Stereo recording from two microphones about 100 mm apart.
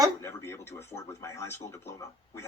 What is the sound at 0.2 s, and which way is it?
Speech, 25° left (ahead or behind).